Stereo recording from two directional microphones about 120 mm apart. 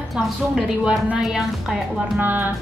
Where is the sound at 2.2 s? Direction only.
15° right (ahead or behind).